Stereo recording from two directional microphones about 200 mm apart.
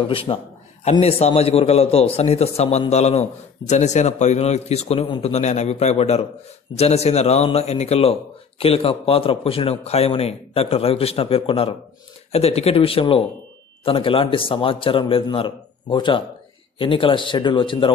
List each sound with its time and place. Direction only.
0.0 s a man's voice: 25° left (ahead or behind)